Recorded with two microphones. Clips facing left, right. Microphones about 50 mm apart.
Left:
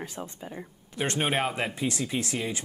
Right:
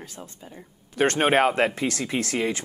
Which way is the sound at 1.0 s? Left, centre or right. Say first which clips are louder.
Right 8 dB; right.